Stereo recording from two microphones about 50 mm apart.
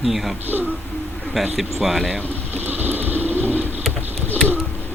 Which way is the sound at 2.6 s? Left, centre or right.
Right.